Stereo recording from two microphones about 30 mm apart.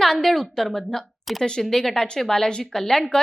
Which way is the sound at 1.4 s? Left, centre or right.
Left.